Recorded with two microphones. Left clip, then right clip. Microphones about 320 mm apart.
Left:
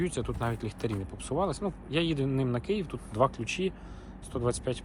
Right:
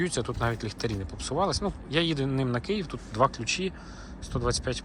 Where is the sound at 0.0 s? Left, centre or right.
Centre.